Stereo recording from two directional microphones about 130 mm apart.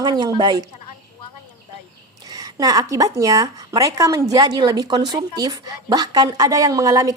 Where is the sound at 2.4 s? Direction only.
30° right (ahead or behind).